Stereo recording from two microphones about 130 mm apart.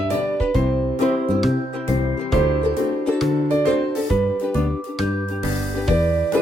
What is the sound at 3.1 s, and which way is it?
Music, centre (ahead or behind).